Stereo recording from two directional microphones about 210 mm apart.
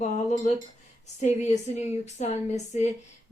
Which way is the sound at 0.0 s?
35° left (ahead or behind).